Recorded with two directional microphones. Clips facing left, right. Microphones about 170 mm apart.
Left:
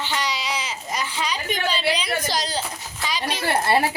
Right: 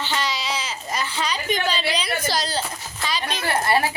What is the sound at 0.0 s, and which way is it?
Baby cry, 15° left (ahead or behind).